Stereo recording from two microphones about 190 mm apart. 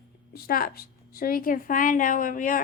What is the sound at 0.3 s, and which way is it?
A woman's voice, 50° left (ahead or behind).